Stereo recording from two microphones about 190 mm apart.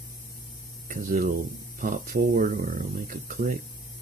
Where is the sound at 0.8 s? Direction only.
45° right (ahead or behind).